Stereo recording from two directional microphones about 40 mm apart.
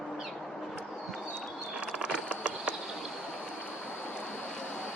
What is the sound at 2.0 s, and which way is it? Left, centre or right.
Mechanisms, right.